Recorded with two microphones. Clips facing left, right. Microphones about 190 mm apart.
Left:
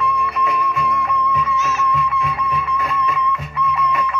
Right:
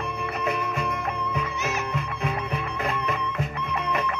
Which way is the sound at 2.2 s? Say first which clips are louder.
Left 5 dB; 50° right (ahead or behind).